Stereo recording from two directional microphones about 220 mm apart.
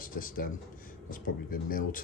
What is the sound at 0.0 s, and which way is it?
Speech, 40° left (ahead or behind).